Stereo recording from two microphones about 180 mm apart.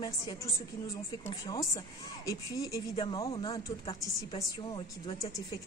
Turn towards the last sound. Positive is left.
turn(degrees=20)  # may be behind; listen again after turning